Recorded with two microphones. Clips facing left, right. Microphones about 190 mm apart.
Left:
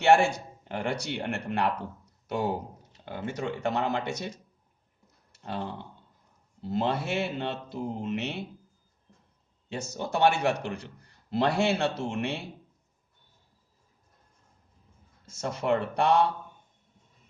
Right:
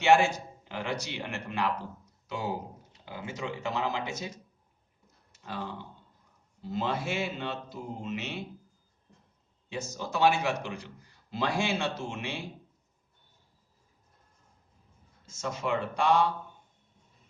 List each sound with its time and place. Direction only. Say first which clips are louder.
0.0 s a man's voice: left 2 dB; 60° left (ahead or behind)
5.3 s a man's voice: left 3 dB; 60° left (ahead or behind)
9.6 s a man's voice: left 2 dB; 65° left (ahead or behind)
15.3 s a man's voice: left 4 dB; 60° left (ahead or behind)